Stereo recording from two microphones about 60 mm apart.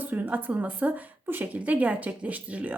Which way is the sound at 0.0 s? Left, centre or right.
Right.